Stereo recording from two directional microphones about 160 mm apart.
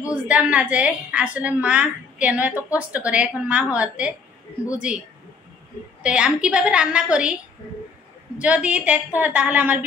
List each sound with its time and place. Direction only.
0.1 s a woman's voice: 10° right (ahead or behind)
6.0 s a woman's voice: 5° right (ahead or behind)
8.4 s a woman's voice: 10° right (ahead or behind)